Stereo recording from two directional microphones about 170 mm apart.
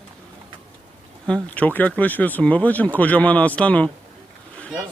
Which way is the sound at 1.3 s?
10° left (ahead or behind).